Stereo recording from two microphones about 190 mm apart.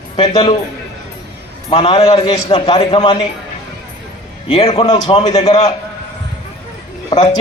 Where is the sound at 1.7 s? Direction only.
30° left (ahead or behind).